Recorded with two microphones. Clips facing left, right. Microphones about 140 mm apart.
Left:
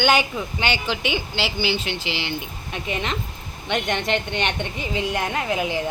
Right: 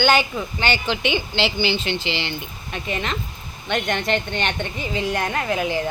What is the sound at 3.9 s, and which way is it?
A woman's voice, 20° left (ahead or behind).